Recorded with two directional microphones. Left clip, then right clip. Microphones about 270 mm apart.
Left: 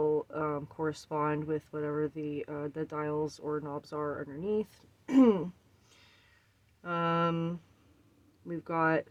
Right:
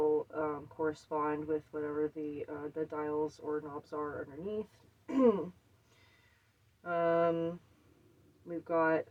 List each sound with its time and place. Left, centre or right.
0.0 s a sound: left
2.5 s speech: left
6.8 s speech: left